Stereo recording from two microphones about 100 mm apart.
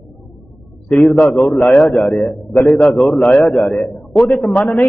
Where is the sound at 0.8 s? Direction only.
10° left (ahead or behind).